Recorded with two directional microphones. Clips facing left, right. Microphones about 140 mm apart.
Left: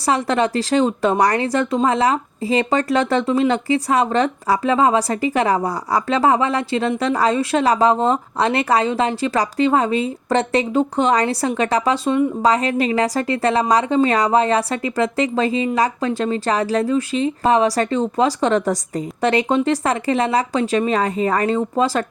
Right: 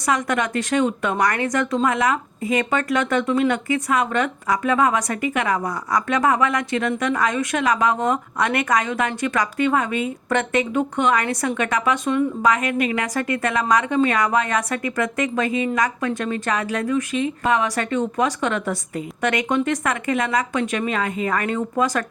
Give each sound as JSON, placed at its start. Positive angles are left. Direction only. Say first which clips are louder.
{"t": 0.0, "sound": "speech", "louder": "left 4 dB", "side_deg": 30}